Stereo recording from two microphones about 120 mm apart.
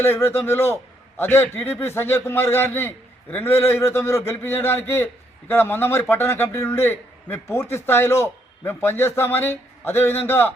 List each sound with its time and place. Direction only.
0.0 s a man's voice: 20° left (ahead or behind)